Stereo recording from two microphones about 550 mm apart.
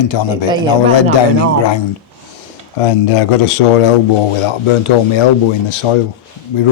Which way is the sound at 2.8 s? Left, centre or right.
Left.